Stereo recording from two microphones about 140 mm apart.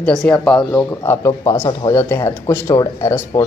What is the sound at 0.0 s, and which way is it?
Speech, 5° left (ahead or behind).